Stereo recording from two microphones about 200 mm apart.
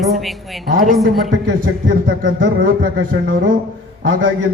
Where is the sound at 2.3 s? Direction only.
55° right (ahead or behind).